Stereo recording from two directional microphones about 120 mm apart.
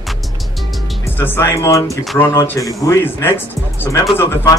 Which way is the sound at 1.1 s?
15° left (ahead or behind).